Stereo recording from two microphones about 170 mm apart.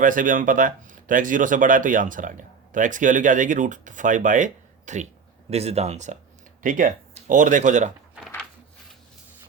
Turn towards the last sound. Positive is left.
turn(degrees=-45)  # may be behind; listen again after turning